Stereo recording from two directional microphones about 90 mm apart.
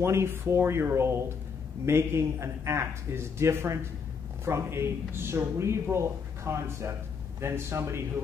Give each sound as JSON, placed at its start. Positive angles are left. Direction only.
{"t": 0.0, "sound": "speech", "side_deg": -30}